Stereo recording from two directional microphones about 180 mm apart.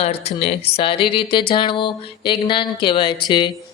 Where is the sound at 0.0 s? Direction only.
35° left (ahead or behind).